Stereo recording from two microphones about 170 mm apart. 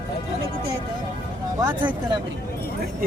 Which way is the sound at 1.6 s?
25° right (ahead or behind).